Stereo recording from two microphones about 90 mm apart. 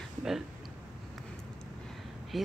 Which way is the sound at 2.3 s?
Centre (ahead or behind).